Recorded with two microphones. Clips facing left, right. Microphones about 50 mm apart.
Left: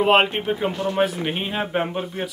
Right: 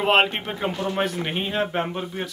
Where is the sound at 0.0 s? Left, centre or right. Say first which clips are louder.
Left 2 dB; centre.